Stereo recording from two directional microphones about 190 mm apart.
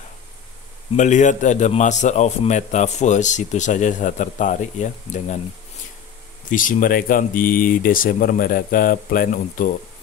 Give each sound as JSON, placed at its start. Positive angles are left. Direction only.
{"t": 0.9, "sound": "a man's voice", "side_deg": 40}
{"t": 6.5, "sound": "speech", "side_deg": 45}